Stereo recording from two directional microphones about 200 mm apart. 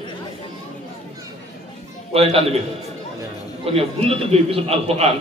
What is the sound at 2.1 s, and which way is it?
Speech, 30° right (ahead or behind).